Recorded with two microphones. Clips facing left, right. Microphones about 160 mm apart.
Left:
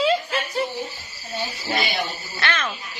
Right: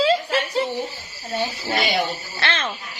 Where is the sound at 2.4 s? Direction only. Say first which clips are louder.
Even; 30° right (ahead or behind).